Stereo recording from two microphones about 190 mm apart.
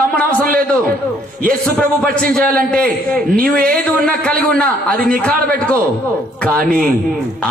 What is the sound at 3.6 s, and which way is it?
Speech, 50° right (ahead or behind).